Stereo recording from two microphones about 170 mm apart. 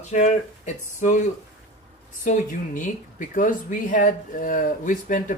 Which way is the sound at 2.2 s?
50° left (ahead or behind).